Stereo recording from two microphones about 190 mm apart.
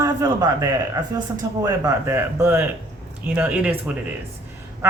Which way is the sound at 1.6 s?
15° right (ahead or behind).